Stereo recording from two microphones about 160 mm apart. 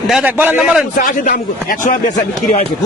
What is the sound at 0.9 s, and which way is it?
Speech, 55° left (ahead or behind).